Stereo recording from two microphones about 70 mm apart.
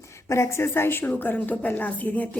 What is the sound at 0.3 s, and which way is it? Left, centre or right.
A woman's voice, left.